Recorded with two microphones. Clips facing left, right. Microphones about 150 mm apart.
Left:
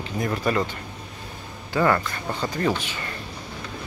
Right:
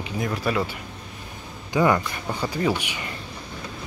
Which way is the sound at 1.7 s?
15° right (ahead or behind).